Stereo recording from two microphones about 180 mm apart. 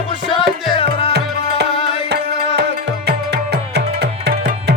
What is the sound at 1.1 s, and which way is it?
Music, 70° right (ahead or behind).